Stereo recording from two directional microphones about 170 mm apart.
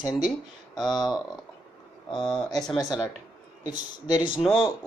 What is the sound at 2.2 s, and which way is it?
Speech, 5° left (ahead or behind).